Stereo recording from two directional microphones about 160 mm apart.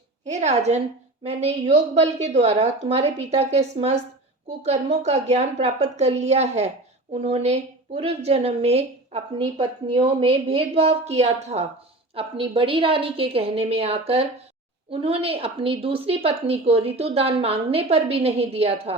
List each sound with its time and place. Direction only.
0.3 s a woman's voice: 45° right (ahead or behind)
12.1 s a woman's voice: 35° right (ahead or behind)